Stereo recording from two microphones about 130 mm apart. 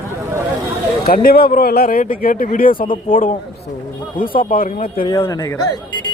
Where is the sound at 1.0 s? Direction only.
90° left.